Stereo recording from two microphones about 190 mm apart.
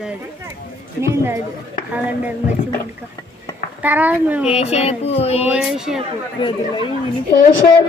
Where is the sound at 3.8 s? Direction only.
10° right (ahead or behind).